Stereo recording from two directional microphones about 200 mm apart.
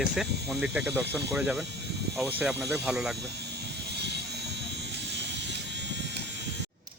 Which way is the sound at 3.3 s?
55° right (ahead or behind).